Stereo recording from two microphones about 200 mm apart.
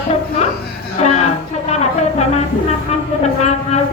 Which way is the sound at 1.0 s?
35° left (ahead or behind).